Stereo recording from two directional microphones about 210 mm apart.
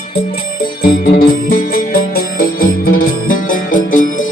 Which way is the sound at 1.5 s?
45° left (ahead or behind).